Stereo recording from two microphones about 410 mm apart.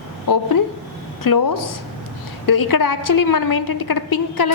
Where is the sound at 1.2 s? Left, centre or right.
Left.